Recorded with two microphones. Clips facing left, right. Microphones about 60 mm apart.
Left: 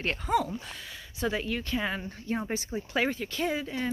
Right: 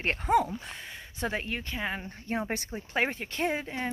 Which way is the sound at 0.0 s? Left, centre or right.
Right.